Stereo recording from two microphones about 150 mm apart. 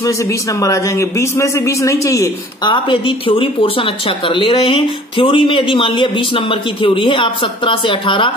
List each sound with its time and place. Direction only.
0.0 s a man's voice: 20° left (ahead or behind)